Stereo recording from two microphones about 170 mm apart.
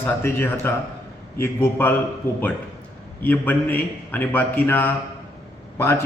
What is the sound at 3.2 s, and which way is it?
Mantra, 10° left (ahead or behind).